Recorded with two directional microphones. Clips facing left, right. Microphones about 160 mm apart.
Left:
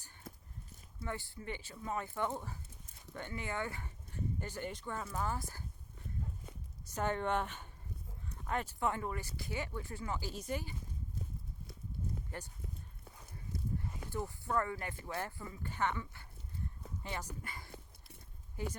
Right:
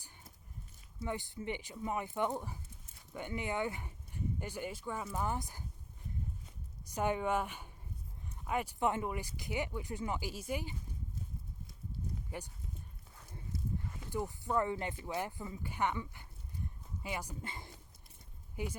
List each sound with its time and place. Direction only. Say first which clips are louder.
1.0 s speech: right 4 dB; 20° right (ahead or behind)
6.9 s speech: right 1 dB; 10° right (ahead or behind)
14.1 s speech: right 2 dB; 15° right (ahead or behind)
17.4 s speech: right 2 dB; 25° right (ahead or behind)